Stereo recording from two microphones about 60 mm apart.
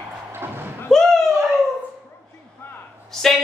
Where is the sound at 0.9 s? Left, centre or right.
Centre.